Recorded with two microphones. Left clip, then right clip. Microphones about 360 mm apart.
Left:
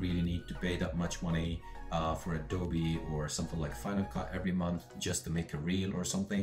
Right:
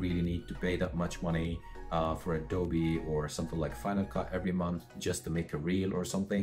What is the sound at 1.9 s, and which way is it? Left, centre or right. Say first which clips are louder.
Speech: right 3 dB; centre.